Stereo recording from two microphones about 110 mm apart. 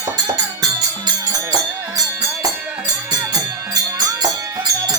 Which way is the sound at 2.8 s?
35° right (ahead or behind).